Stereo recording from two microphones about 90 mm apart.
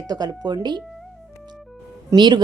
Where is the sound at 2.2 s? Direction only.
55° right (ahead or behind).